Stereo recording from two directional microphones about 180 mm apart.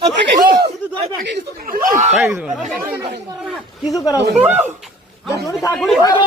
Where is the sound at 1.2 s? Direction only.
60° right (ahead or behind).